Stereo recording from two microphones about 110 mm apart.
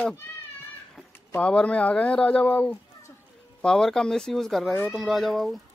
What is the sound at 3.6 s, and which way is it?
Speech, 5° left (ahead or behind).